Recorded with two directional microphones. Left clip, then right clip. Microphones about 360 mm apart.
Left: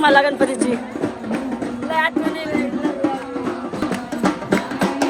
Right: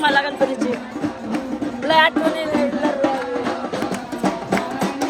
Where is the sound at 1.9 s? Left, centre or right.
Centre.